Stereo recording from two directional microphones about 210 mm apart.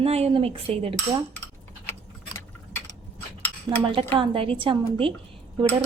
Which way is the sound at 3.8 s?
25° right (ahead or behind).